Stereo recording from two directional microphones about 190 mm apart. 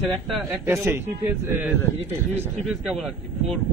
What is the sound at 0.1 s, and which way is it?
A man's voice, 10° right (ahead or behind).